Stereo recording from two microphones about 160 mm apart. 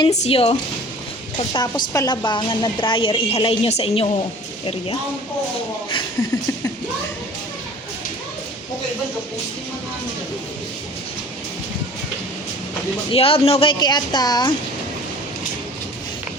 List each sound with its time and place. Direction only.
0.1 s a woman's voice: 40° left (ahead or behind)
1.5 s a woman's voice: 25° left (ahead or behind)
13.1 s speech: 35° left (ahead or behind)